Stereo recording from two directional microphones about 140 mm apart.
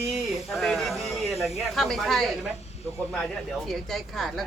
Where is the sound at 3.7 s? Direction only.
Centre (ahead or behind).